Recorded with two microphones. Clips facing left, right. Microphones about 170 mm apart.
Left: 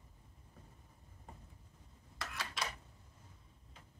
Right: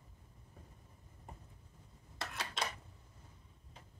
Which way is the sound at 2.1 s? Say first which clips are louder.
Right 2 dB; 25° right (ahead or behind).